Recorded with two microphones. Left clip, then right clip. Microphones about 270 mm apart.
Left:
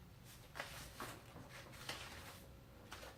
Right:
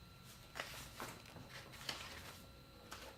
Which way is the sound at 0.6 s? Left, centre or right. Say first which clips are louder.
Right 1 dB; right.